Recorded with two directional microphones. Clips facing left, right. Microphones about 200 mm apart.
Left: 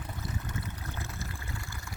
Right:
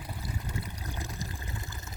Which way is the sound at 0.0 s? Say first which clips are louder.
Even; 15° right (ahead or behind).